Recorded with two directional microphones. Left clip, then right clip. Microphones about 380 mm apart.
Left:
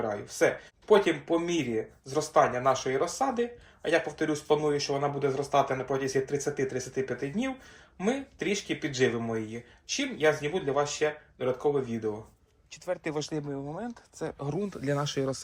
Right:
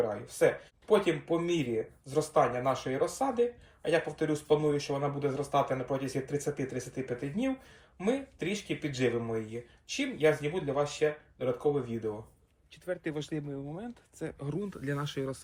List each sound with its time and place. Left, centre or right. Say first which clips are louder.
0.1 s speech: left 1 dB; left